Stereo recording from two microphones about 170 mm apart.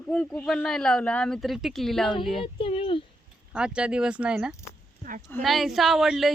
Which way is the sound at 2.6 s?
30° left (ahead or behind).